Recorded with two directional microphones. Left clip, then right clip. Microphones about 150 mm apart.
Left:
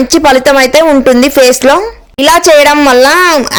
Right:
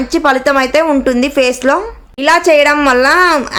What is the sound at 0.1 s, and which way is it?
A woman's voice, 50° left (ahead or behind).